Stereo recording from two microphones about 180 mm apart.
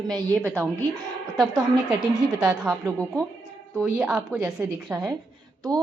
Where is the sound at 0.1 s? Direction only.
5° left (ahead or behind).